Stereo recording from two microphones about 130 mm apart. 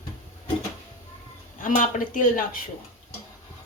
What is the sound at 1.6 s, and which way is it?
Speech, 85° left.